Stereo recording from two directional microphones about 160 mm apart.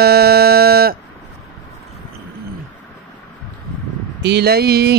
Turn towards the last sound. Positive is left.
turn(degrees=-85)